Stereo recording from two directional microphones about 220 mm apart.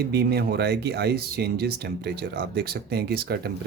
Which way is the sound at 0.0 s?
45° right (ahead or behind).